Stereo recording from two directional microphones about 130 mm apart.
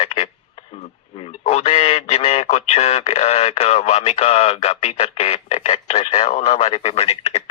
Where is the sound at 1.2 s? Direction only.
55° left (ahead or behind).